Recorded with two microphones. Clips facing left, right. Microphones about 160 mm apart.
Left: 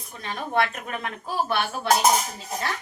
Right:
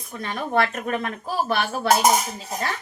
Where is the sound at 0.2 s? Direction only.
50° right (ahead or behind).